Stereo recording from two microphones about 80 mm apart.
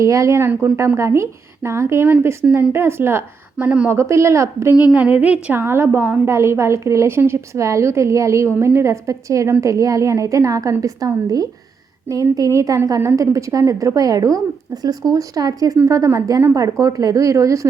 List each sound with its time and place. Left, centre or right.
0.0 s a woman's voice: right
4.9 s a woman's voice: centre
5.5 s a woman's voice: right